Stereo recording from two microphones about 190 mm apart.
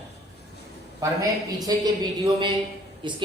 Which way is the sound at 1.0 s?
20° right (ahead or behind).